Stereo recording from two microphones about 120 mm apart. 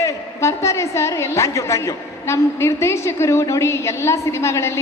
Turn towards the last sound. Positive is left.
turn(degrees=20)  # may be behind; listen again after turning